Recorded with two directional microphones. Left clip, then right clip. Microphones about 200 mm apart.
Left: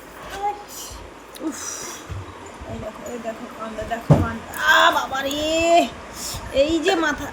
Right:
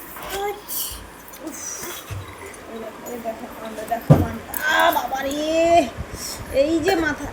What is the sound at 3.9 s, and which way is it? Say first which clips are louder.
A woman's voice: right 2 dB; 15° left (ahead or behind).